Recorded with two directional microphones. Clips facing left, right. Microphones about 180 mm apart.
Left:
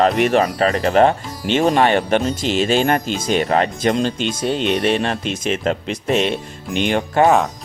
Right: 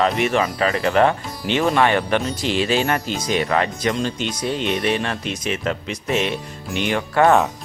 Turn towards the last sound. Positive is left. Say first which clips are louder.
# left 2 dB
turn(degrees=25)  # may be behind; listen again after turning